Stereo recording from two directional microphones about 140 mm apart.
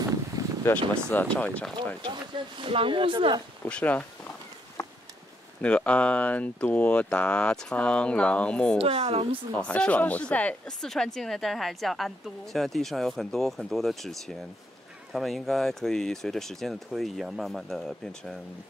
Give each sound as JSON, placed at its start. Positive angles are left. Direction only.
{"t": 0.0, "sound": "a sound", "side_deg": -25}
{"t": 0.7, "sound": "speech", "side_deg": 15}
{"t": 2.0, "sound": "speech", "side_deg": -35}
{"t": 3.6, "sound": "speech", "side_deg": 10}
{"t": 4.8, "sound": "a sound", "side_deg": 25}
{"t": 5.6, "sound": "speech", "side_deg": 10}
{"t": 8.7, "sound": "speech", "side_deg": -45}
{"t": 9.6, "sound": "speech", "side_deg": 10}